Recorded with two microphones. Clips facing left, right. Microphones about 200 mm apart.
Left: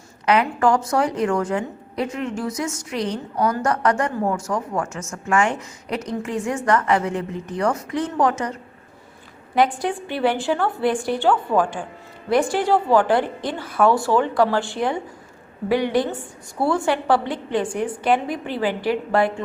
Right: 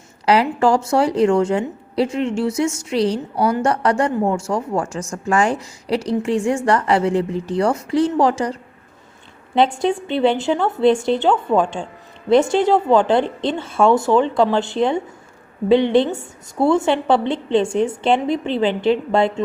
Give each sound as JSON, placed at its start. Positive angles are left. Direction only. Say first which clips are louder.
{"t": 0.3, "sound": "a woman's voice", "louder": "right 3 dB", "side_deg": -30}
{"t": 9.6, "sound": "a woman's voice", "louder": "right 3 dB", "side_deg": -25}